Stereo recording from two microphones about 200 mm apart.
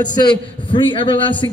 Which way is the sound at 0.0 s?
20° left (ahead or behind).